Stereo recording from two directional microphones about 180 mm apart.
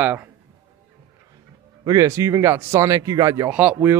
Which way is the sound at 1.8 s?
20° right (ahead or behind).